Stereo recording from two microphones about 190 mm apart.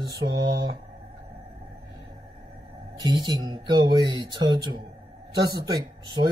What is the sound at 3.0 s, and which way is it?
Speech, 20° right (ahead or behind).